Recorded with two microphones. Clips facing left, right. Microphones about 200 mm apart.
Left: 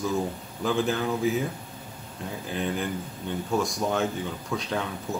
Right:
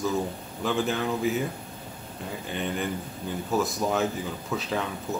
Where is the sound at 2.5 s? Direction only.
Centre (ahead or behind).